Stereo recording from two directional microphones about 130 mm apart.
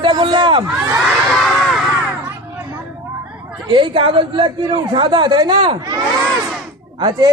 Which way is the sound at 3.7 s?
40° right (ahead or behind).